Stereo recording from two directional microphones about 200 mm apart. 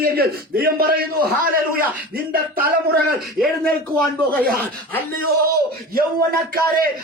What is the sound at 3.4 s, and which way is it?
Speech, 5° left (ahead or behind).